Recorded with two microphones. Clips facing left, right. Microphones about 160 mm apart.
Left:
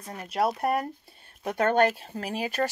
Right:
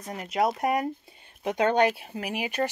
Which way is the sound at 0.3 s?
Centre (ahead or behind).